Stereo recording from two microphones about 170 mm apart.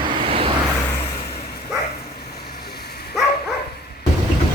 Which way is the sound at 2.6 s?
70° left (ahead or behind).